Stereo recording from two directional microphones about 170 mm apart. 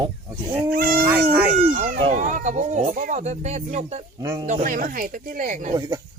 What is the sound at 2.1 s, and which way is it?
Speech, 50° right (ahead or behind).